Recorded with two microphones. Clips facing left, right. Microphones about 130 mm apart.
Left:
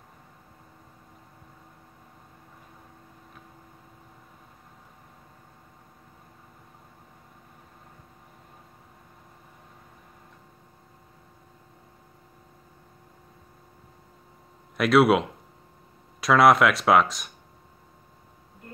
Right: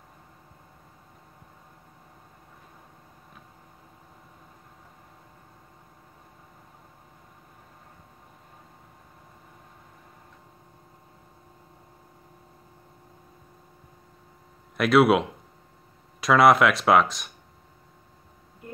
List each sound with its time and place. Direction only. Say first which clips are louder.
14.8 s speech: even; centre (ahead or behind)